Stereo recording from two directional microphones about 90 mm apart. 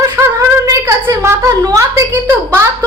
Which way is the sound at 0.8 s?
30° right (ahead or behind).